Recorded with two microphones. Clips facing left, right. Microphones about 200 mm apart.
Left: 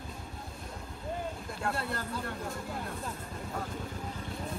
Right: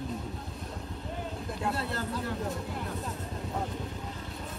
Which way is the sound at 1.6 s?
Centre (ahead or behind).